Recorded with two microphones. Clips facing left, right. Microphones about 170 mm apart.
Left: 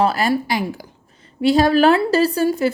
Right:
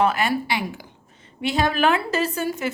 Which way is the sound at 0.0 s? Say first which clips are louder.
Left 3 dB; 35° left (ahead or behind).